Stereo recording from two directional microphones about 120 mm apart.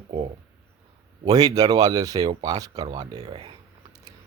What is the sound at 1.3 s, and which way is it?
Speech, 30° right (ahead or behind).